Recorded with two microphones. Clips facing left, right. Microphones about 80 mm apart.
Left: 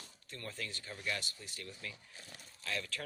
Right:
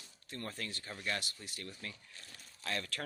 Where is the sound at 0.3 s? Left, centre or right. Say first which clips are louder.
Right 2 dB; right.